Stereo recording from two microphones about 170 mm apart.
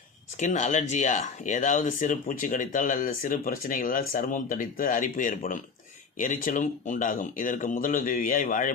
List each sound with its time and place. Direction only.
0.3 s speech: 45° left (ahead or behind)